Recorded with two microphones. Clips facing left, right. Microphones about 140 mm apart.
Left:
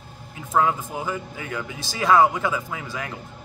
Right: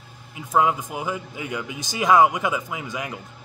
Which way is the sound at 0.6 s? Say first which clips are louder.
Right 1 dB; 15° right (ahead or behind).